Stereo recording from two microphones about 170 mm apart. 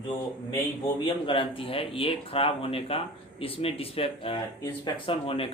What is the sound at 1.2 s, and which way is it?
Speech, 30° left (ahead or behind).